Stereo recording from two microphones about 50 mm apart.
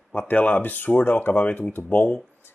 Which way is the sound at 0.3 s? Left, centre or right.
Left.